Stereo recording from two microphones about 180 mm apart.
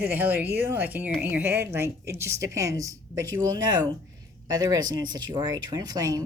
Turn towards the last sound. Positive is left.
turn(degrees=-20)  # may be behind; listen again after turning